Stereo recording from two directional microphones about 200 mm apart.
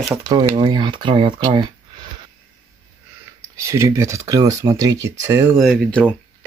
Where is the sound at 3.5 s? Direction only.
15° right (ahead or behind).